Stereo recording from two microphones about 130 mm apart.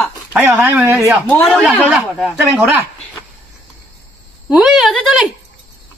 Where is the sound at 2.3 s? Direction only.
15° right (ahead or behind).